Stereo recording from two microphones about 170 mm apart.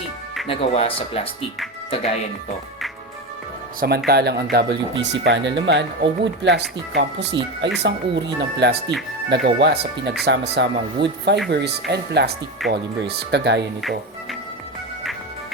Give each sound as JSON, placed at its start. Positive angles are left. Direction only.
{"t": 0.4, "sound": "speech", "side_deg": 35}
{"t": 3.8, "sound": "speech", "side_deg": -65}
{"t": 4.5, "sound": "speech", "side_deg": -85}
{"t": 11.4, "sound": "speech", "side_deg": -80}